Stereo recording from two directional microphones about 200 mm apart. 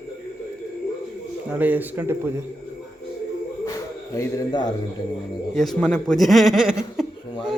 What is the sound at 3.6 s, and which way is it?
Bird, 15° left (ahead or behind).